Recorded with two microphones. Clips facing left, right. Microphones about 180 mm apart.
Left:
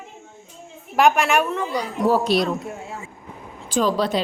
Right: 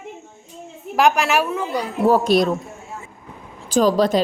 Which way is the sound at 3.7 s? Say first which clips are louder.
Right 4 dB; 40° right (ahead or behind).